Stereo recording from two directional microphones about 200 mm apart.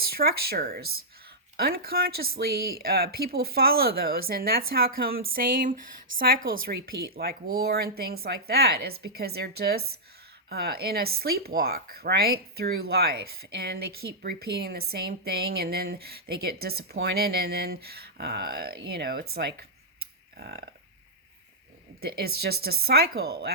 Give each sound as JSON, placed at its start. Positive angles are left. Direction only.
{"t": 0.1, "sound": "speech", "side_deg": -50}
{"t": 22.4, "sound": "speech", "side_deg": -50}